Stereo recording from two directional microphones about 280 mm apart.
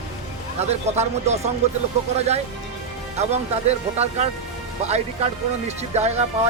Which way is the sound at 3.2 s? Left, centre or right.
Right.